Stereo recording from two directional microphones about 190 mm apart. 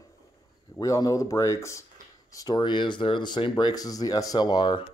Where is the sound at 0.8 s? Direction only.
20° left (ahead or behind).